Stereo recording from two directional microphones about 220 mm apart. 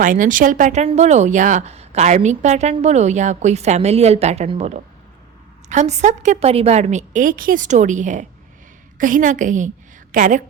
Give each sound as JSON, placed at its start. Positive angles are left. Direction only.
{"t": 0.0, "sound": "a woman's voice", "side_deg": -35}